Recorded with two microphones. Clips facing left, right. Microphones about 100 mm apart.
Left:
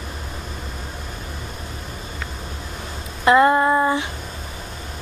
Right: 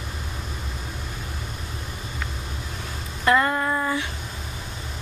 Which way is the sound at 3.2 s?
25° left (ahead or behind).